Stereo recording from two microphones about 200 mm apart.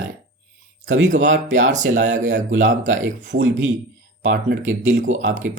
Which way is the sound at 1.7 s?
40° right (ahead or behind).